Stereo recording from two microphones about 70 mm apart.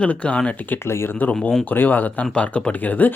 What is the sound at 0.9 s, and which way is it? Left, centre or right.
Speech, left.